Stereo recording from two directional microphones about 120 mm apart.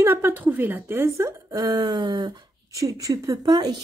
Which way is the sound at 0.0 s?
20° right (ahead or behind).